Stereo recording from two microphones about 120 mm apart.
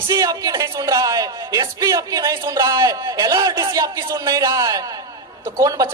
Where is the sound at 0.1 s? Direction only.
30° right (ahead or behind).